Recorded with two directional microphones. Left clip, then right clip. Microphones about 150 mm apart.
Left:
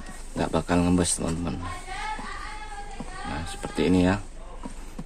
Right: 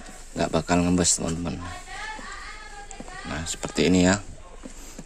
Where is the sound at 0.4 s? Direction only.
40° right (ahead or behind).